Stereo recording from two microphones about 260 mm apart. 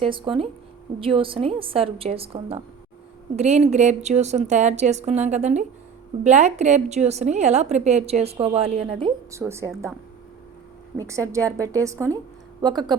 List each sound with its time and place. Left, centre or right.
0.1 s a woman's voice: centre
10.9 s a woman's voice: centre